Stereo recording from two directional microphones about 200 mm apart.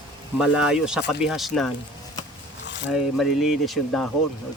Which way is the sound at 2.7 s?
65° left (ahead or behind).